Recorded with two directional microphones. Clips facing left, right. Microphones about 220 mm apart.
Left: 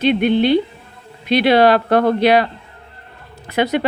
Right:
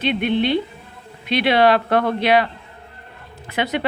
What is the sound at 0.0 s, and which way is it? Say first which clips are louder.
Speech: left 5 dB; 40° left (ahead or behind).